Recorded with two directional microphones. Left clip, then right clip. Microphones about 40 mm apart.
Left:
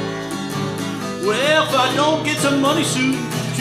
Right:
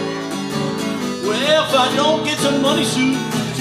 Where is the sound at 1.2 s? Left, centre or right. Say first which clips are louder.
Even; centre.